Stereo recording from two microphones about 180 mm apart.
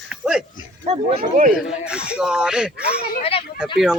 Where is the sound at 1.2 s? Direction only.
50° right (ahead or behind).